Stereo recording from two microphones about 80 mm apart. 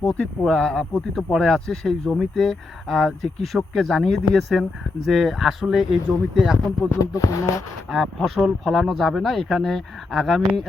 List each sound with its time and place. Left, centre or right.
0.0 s speech: centre
6.9 s a sound: left
7.9 s speech: centre